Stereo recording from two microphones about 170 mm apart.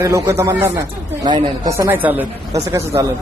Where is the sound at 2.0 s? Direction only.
10° right (ahead or behind).